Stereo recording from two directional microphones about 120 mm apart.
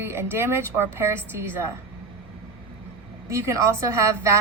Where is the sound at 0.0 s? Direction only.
20° right (ahead or behind).